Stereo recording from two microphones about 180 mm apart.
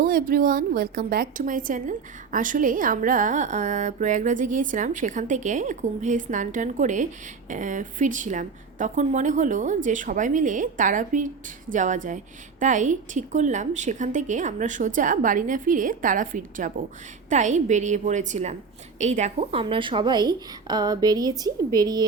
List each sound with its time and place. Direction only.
0.0 s a woman's voice: 50° right (ahead or behind); by 22.0 s 20° right (ahead or behind)